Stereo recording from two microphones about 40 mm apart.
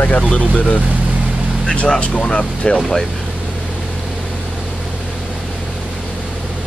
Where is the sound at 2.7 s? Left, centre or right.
Centre.